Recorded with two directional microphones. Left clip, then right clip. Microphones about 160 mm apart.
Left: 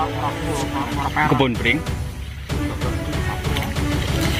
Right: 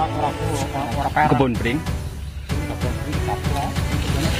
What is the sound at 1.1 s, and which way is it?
Speech, 20° right (ahead or behind).